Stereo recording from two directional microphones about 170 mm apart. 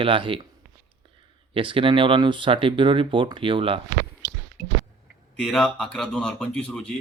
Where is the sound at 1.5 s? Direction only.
30° right (ahead or behind).